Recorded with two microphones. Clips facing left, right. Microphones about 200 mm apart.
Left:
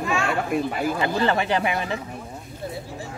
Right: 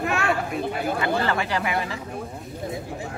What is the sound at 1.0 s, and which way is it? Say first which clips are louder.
Speech: left 3 dB; 25° left (ahead or behind).